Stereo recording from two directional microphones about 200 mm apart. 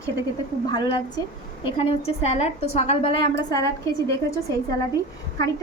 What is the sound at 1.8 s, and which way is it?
A woman's voice, 30° left (ahead or behind).